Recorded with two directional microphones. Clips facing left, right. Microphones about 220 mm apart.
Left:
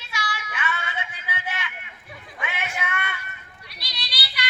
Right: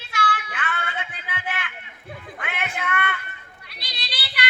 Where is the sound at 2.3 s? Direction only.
60° right (ahead or behind).